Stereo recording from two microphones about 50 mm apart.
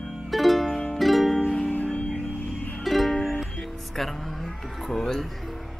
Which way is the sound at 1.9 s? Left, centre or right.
Left.